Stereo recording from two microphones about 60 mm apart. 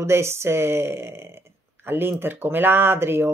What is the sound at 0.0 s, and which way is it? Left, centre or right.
A woman's voice, right.